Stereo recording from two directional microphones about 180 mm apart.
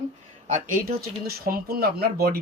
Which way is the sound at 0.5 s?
55° right (ahead or behind).